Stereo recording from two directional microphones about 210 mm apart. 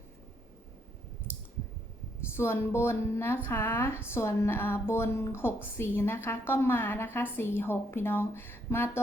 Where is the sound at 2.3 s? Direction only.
10° left (ahead or behind).